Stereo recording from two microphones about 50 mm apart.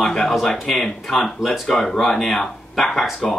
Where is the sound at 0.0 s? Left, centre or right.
Centre.